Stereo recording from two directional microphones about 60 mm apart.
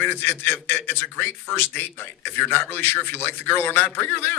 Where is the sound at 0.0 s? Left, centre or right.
Left.